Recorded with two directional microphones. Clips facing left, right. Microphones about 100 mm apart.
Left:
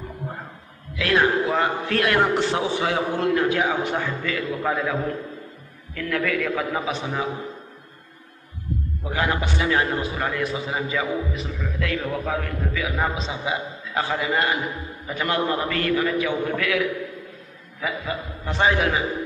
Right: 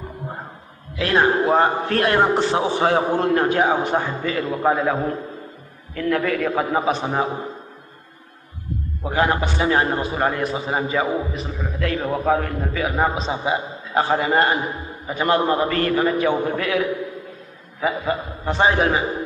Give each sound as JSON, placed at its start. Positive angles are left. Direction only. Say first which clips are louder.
{"t": 0.9, "sound": "a man's voice", "louder": "right 2 dB", "side_deg": -35}
{"t": 9.0, "sound": "a man's voice", "louder": "right 5 dB", "side_deg": -35}